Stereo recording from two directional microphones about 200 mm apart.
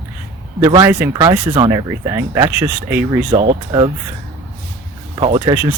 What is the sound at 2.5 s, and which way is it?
Speech, 10° right (ahead or behind).